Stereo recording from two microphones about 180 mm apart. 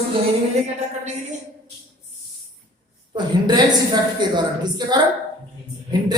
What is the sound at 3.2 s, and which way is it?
A woman's voice, 25° right (ahead or behind).